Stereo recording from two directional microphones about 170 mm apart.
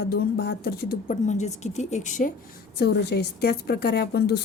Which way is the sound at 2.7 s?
75° left (ahead or behind).